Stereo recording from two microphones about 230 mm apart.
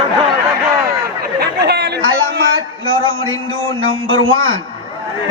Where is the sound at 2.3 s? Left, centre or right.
Right.